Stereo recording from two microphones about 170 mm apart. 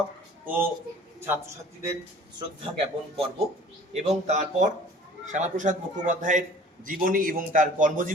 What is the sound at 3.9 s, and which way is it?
A man's voice, 40° right (ahead or behind).